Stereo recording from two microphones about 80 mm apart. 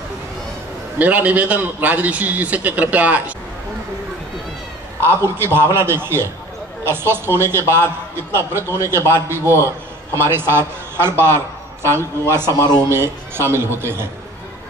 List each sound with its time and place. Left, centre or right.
0.9 s a man's voice: right
5.0 s a man's voice: right